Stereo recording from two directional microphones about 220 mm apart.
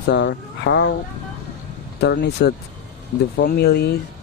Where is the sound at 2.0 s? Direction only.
50° left (ahead or behind).